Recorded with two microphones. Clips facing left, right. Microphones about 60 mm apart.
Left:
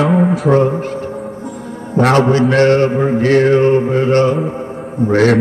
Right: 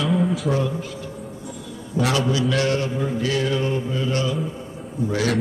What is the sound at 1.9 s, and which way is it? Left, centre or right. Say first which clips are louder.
Mantra: left 10 dB; left.